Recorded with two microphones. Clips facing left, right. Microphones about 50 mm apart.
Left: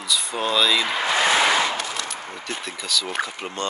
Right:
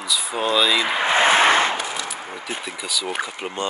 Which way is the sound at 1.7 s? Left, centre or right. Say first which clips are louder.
Right 1 dB; centre.